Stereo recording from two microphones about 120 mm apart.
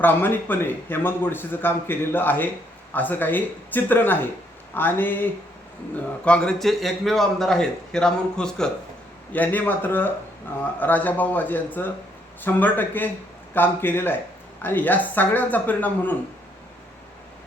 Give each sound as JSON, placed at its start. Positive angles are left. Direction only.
{"t": 0.0, "sound": "a man's voice", "side_deg": 15}